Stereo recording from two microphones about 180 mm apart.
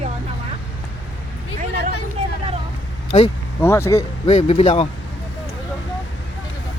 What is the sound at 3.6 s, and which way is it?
Speech, 15° left (ahead or behind).